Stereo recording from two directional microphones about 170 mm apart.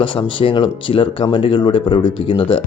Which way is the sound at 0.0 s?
30° left (ahead or behind).